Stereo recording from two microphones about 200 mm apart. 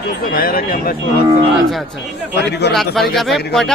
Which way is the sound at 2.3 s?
55° left (ahead or behind).